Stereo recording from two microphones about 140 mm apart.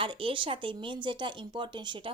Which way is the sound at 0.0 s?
40° right (ahead or behind).